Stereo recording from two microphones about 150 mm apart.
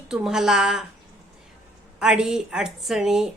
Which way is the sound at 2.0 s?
5° right (ahead or behind).